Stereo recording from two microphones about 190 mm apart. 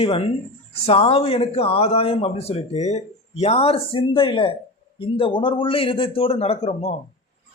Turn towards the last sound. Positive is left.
turn(degrees=30)  # may be behind; listen again after turning